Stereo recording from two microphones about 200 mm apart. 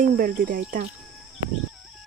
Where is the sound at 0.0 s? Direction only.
45° right (ahead or behind).